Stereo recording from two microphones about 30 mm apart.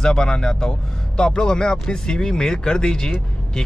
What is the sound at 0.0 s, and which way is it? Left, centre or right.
Speech, left.